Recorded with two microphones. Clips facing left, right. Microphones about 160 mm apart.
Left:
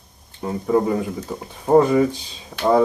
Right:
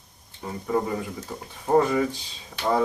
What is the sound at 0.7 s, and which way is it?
Speech, 20° left (ahead or behind).